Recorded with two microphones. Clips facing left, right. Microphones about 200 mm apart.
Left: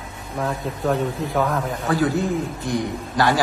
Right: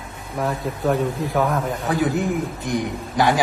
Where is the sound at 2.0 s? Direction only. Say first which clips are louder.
Even; 20° right (ahead or behind).